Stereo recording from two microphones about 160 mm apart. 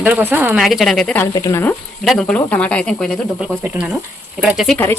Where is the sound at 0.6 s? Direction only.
Centre (ahead or behind).